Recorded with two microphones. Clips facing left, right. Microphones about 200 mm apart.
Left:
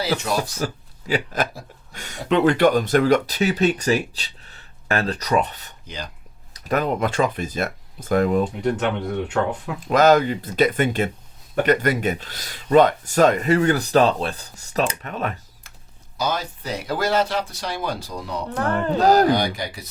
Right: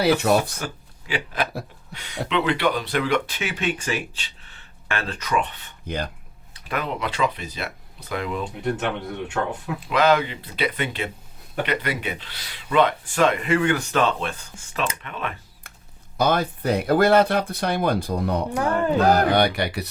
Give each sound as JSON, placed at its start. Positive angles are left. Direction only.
{"t": 0.0, "sound": "speech", "side_deg": -60}
{"t": 0.6, "sound": "speech", "side_deg": 40}
{"t": 9.8, "sound": "speech", "side_deg": 45}
{"t": 16.1, "sound": "speech", "side_deg": -55}
{"t": 18.5, "sound": "music", "side_deg": -10}
{"t": 19.0, "sound": "speech", "side_deg": 35}
{"t": 19.3, "sound": "speech", "side_deg": -65}